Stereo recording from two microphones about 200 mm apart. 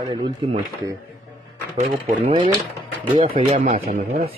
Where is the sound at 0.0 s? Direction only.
20° right (ahead or behind).